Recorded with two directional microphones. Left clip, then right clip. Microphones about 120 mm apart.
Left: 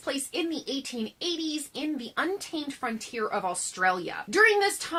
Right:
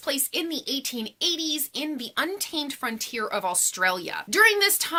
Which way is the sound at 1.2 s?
15° right (ahead or behind).